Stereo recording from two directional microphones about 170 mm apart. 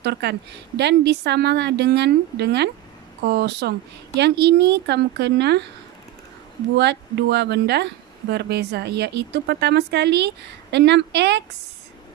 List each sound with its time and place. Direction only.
0.0 s a woman's voice: 75° right (ahead or behind)
6.8 s speech: 90° right